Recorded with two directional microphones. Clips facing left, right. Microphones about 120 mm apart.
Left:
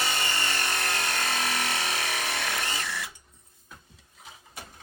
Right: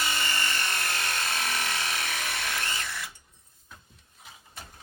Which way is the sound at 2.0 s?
20° left (ahead or behind).